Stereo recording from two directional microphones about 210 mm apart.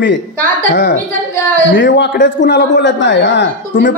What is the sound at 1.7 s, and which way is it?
A man's voice, 60° left (ahead or behind).